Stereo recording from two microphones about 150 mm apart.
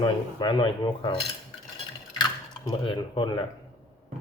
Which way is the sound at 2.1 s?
30° left (ahead or behind).